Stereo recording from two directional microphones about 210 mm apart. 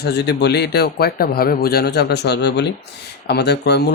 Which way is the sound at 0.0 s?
50° left (ahead or behind).